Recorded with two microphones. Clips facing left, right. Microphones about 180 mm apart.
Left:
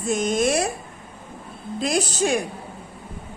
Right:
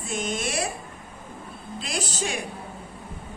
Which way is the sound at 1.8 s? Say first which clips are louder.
Left 9 dB; 45° left (ahead or behind).